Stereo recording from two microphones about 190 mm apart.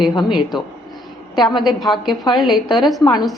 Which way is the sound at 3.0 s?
20° left (ahead or behind).